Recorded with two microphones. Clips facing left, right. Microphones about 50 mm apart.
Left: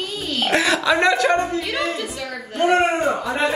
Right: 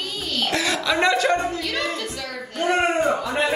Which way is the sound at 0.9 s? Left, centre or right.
Centre.